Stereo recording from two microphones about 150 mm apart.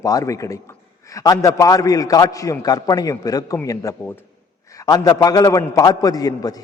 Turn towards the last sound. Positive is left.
turn(degrees=25)  # may be behind; listen again after turning